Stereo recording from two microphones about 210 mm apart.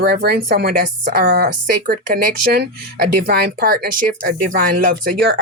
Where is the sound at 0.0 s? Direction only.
50° right (ahead or behind).